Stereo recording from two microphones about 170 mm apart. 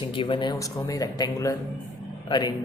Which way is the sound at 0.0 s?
30° left (ahead or behind).